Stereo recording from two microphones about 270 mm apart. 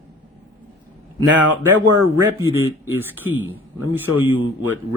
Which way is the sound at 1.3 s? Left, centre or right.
Right.